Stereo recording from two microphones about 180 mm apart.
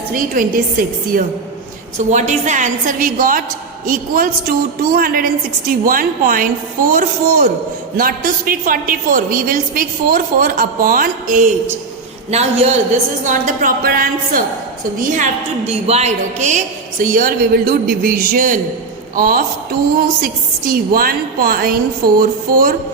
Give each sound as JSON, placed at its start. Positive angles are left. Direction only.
{"t": 0.1, "sound": "a woman's voice", "side_deg": -50}